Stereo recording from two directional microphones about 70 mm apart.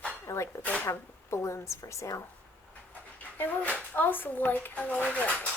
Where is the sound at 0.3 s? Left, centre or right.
Left.